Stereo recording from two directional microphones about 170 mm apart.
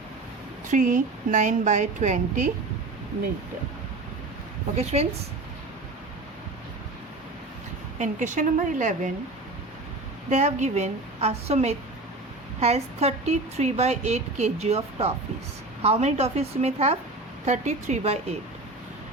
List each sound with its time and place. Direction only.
0.7 s a woman's voice: 50° right (ahead or behind)
4.8 s speech: 40° right (ahead or behind)
7.9 s a woman's voice: 45° right (ahead or behind)
10.2 s a woman's voice: 40° right (ahead or behind)